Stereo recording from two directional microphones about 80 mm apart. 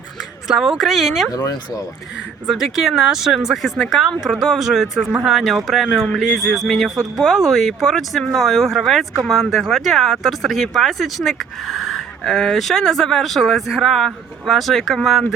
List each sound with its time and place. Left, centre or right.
0.4 s speech: centre
1.3 s speech: left
2.5 s speech: centre